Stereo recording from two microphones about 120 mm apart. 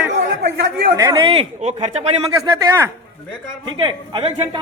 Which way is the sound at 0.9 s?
35° right (ahead or behind).